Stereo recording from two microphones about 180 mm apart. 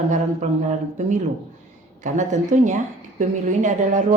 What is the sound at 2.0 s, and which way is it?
A woman's voice, 40° right (ahead or behind).